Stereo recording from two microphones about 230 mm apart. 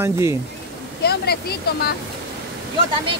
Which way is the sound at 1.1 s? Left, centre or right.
Left.